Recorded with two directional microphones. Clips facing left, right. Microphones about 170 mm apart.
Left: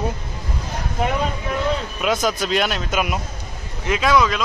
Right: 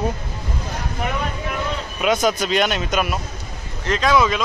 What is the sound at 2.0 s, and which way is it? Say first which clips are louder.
A man's voice: right 5 dB; centre (ahead or behind).